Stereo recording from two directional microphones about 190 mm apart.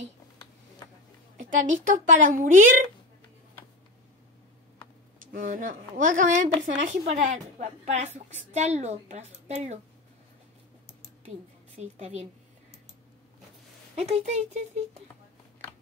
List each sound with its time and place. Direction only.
1.4 s a woman's voice: 40° right (ahead or behind)
5.3 s a woman's voice: 45° right (ahead or behind)
11.2 s a woman's voice: 35° right (ahead or behind)
13.9 s a woman's voice: 35° right (ahead or behind)